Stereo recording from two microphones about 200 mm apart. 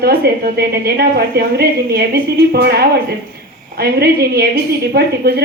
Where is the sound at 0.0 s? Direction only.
50° right (ahead or behind).